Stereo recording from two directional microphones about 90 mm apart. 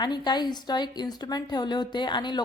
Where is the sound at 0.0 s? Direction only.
55° left (ahead or behind).